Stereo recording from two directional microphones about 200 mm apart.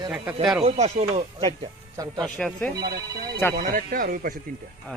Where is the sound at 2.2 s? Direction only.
5° left (ahead or behind).